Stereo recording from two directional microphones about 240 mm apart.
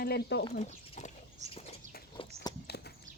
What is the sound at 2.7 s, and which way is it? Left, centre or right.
Clip-clop, left.